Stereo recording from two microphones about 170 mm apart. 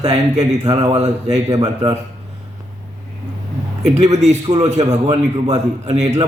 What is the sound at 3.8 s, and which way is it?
A man's voice, 40° right (ahead or behind).